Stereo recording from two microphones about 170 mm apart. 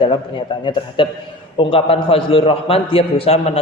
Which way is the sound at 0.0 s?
30° left (ahead or behind).